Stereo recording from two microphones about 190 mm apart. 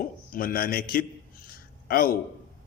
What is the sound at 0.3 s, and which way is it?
A man's voice, 50° left (ahead or behind).